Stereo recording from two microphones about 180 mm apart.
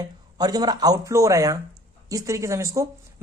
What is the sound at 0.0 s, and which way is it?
Speech, 20° right (ahead or behind).